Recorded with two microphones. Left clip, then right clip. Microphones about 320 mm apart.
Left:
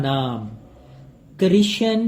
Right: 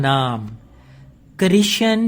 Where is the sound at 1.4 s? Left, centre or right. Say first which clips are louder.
Right 2 dB; right.